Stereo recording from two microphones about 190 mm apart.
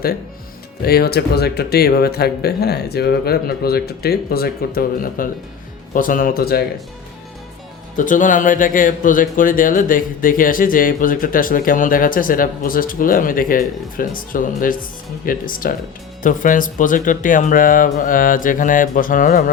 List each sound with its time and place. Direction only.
0.8 s speech: 55° left (ahead or behind)
7.9 s speech: 45° left (ahead or behind)